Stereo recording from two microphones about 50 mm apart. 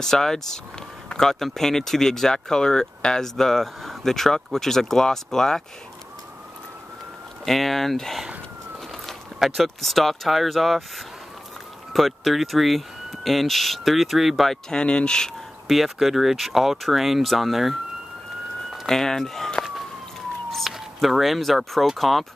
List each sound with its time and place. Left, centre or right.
0.0 s speech: centre
7.4 s speech: centre
14.7 s speech: centre
15.7 s speech: centre
18.9 s speech: centre
20.7 s speech: centre